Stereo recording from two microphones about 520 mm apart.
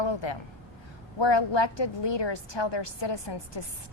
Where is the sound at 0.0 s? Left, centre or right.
Left.